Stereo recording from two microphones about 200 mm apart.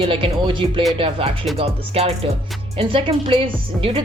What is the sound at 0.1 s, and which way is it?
A woman's voice, 25° right (ahead or behind).